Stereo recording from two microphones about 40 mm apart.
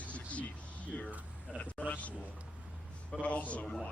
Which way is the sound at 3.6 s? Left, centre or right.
Centre.